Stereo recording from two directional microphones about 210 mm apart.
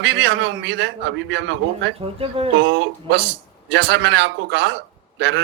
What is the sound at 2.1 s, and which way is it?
Speech, 25° right (ahead or behind).